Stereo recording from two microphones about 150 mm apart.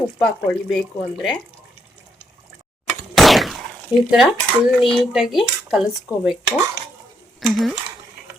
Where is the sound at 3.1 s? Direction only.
Centre (ahead or behind).